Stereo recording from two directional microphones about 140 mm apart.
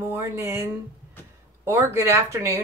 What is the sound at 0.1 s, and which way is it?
Speech, 20° right (ahead or behind).